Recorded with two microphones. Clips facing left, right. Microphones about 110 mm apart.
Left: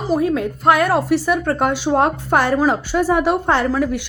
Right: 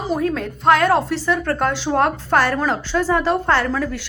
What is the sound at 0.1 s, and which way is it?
A woman's voice, 10° left (ahead or behind).